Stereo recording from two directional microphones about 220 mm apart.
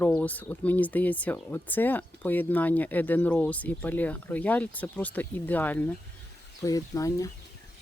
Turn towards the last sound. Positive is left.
turn(degrees=15)  # may be behind; listen again after turning